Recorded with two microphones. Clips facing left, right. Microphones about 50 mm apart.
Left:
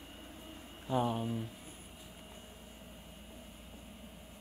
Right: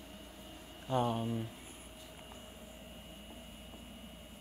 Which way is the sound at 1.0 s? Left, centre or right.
Centre.